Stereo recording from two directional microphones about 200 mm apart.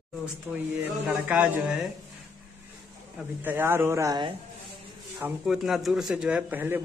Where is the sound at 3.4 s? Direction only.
10° right (ahead or behind).